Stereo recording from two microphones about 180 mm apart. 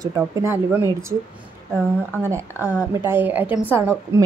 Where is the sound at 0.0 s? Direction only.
20° right (ahead or behind).